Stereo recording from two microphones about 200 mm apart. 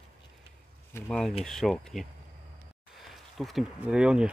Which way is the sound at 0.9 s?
5° left (ahead or behind).